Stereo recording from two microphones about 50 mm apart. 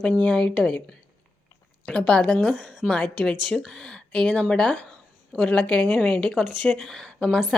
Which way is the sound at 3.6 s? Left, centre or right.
Centre.